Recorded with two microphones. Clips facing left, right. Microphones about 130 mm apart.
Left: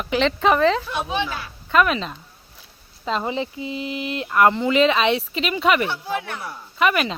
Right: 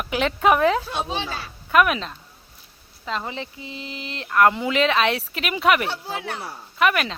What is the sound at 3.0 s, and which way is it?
Speech, 20° left (ahead or behind).